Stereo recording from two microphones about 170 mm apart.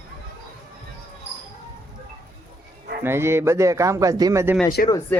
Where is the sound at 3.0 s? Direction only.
15° right (ahead or behind).